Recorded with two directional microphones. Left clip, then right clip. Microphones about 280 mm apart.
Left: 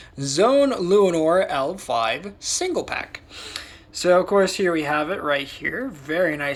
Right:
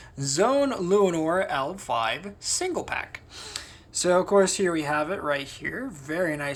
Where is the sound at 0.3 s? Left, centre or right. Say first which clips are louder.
Left 5 dB; centre.